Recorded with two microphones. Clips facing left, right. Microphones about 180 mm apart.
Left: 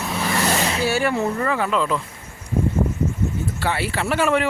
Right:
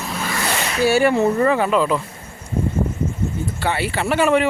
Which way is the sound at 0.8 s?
15° right (ahead or behind).